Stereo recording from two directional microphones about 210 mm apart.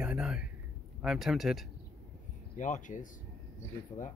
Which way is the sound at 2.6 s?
35° left (ahead or behind).